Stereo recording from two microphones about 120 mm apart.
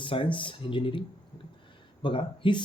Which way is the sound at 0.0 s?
45° left (ahead or behind).